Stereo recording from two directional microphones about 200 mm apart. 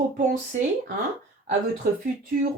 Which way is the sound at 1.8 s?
45° right (ahead or behind).